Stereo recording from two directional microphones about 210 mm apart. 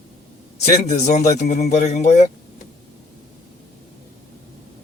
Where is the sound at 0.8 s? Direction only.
30° left (ahead or behind).